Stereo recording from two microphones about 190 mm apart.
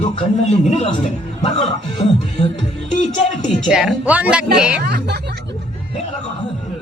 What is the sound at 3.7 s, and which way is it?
Speech, 5° right (ahead or behind).